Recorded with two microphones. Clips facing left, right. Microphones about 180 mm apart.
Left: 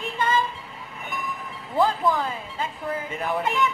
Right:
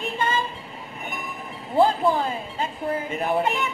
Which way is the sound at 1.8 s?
30° right (ahead or behind).